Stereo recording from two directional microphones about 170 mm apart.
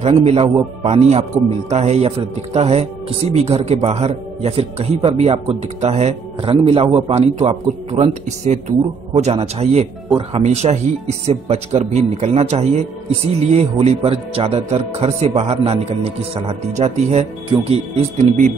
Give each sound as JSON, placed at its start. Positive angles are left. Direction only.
{"t": 0.2, "sound": "speech", "side_deg": -35}